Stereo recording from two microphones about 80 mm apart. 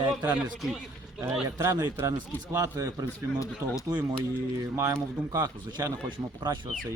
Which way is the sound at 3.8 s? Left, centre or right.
Right.